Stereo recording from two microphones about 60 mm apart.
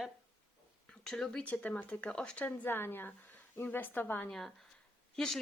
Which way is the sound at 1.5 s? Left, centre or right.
Left.